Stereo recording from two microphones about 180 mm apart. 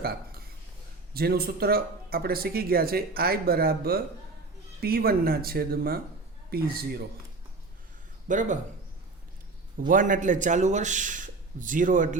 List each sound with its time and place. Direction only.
0.0 s a sound: 60° right (ahead or behind)
1.1 s speech: 60° right (ahead or behind)
8.3 s a man's voice: 45° right (ahead or behind)
9.9 s a man's voice: 45° right (ahead or behind)